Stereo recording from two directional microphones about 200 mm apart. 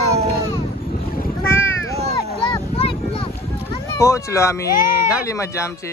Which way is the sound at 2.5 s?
25° left (ahead or behind).